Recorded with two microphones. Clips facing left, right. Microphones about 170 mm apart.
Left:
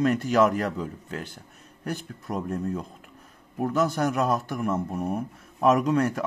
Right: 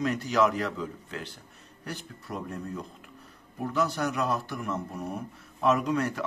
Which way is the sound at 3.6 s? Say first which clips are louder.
Left 4 dB; 45° left (ahead or behind).